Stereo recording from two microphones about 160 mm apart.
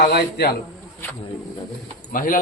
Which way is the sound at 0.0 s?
90° left.